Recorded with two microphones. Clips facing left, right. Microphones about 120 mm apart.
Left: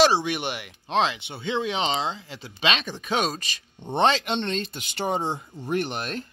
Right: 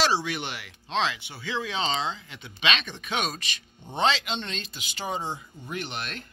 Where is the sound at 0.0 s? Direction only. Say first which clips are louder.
Left 6 dB; 20° left (ahead or behind).